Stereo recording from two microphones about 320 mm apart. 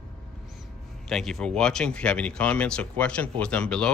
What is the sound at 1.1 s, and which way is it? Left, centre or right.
Speech, centre.